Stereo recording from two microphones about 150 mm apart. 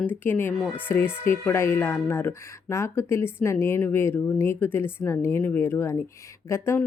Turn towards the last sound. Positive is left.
turn(degrees=15)  # may be behind; listen again after turning